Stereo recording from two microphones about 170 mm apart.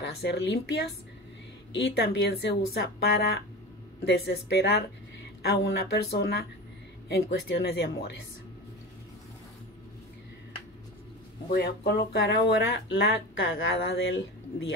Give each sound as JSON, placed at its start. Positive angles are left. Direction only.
{"t": 0.0, "sound": "speech", "side_deg": 90}
{"t": 11.5, "sound": "speech", "side_deg": 70}